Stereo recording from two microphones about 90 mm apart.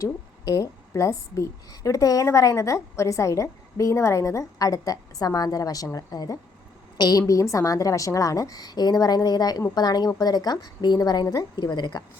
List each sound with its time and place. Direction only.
0.0 s a woman's voice: 40° left (ahead or behind)